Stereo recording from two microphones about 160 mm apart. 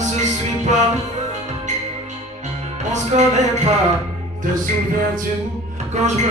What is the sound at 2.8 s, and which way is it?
Music, 45° right (ahead or behind).